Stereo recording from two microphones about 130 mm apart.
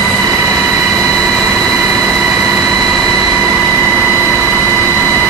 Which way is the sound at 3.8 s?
10° right (ahead or behind).